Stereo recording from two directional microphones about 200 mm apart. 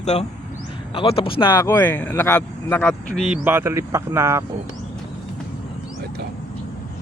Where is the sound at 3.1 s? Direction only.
5° right (ahead or behind).